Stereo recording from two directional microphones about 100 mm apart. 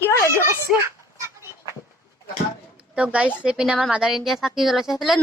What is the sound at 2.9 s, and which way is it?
A woman's voice, 15° right (ahead or behind).